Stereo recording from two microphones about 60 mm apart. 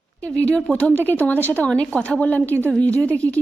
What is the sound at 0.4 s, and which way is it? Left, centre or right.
A woman's voice, left.